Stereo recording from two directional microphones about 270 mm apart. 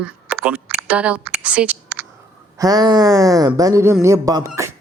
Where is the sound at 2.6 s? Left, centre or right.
Centre.